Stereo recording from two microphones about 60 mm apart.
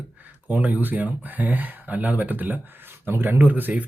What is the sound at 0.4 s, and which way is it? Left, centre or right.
A man's voice, right.